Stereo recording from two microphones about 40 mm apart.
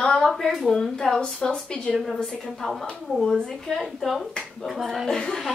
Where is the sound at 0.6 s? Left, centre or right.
Centre.